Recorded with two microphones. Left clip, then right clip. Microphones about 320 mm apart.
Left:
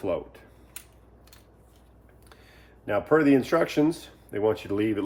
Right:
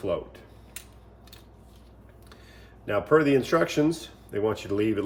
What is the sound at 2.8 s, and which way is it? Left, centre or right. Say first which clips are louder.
Speech: even; centre.